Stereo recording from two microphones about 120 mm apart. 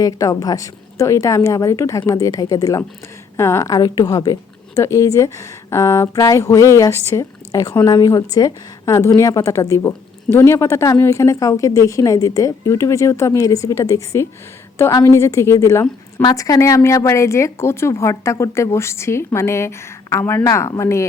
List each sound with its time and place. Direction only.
0.0 s a woman's voice: 30° left (ahead or behind)